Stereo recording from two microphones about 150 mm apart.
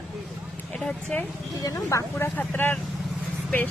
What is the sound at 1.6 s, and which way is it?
Speech, 20° left (ahead or behind).